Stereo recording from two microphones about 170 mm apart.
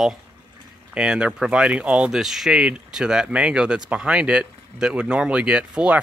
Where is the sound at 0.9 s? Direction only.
5° right (ahead or behind).